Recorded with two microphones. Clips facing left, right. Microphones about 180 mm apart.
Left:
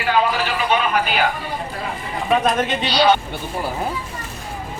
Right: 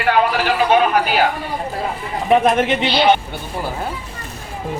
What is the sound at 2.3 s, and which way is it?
Speech, 25° right (ahead or behind).